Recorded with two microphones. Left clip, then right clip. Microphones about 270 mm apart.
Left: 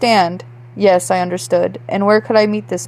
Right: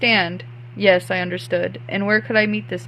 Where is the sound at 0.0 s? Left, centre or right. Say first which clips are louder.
Left 5 dB; centre.